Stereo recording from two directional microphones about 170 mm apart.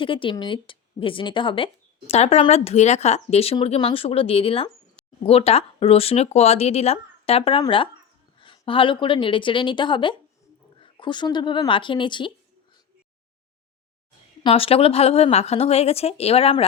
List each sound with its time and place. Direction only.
0.0 s a woman's voice: 30° left (ahead or behind)
14.4 s a woman's voice: 35° left (ahead or behind)